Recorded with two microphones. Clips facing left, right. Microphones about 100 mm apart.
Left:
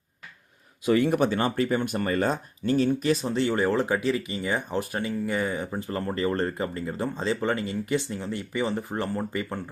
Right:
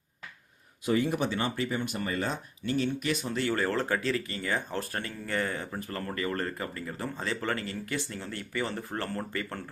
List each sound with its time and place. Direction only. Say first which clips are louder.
0.9 s speech: left 6 dB; 65° left (ahead or behind); by 9.6 s 15° left (ahead or behind)